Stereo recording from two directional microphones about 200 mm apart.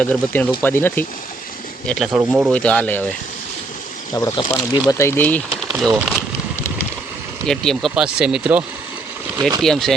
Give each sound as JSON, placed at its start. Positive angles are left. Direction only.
{"t": 0.0, "sound": "speech", "side_deg": 5}
{"t": 4.1, "sound": "speech", "side_deg": 20}
{"t": 5.6, "sound": "speech", "side_deg": -5}
{"t": 7.4, "sound": "speech", "side_deg": 0}